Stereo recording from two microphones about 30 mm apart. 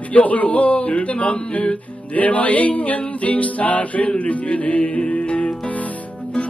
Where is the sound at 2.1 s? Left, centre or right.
Left.